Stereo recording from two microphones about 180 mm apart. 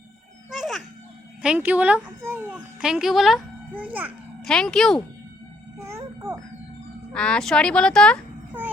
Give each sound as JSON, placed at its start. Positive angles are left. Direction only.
{"t": 0.5, "sound": "music", "side_deg": 0}
{"t": 1.4, "sound": "a child's voice", "side_deg": -5}
{"t": 4.4, "sound": "a child's voice", "side_deg": 5}
{"t": 5.8, "sound": "music", "side_deg": -15}
{"t": 7.1, "sound": "a child's voice", "side_deg": 5}